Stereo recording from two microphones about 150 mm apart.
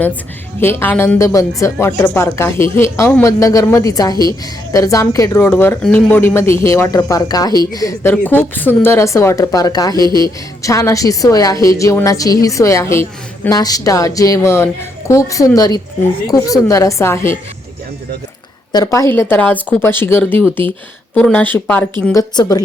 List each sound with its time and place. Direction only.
0.6 s a woman's voice: 15° left (ahead or behind)
8.1 s a woman's voice: 10° left (ahead or behind)
18.7 s a woman's voice: 25° left (ahead or behind)
22.1 s a woman's voice: 25° left (ahead or behind)